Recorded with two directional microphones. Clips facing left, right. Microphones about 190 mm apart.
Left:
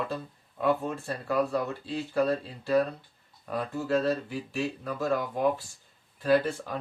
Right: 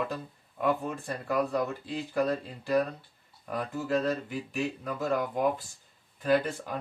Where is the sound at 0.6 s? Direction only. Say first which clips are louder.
Left 2 dB; 15° right (ahead or behind).